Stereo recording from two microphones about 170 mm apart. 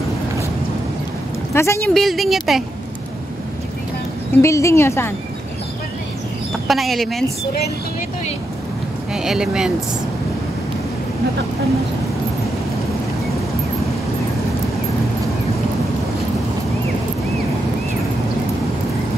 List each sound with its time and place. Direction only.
1.5 s speech: 15° left (ahead or behind)
2.0 s speech: centre (ahead or behind)
4.4 s a woman's voice: 15° left (ahead or behind)
6.7 s speech: centre (ahead or behind)
9.1 s speech: 5° right (ahead or behind)